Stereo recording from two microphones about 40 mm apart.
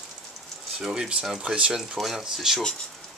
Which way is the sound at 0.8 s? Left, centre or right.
Centre.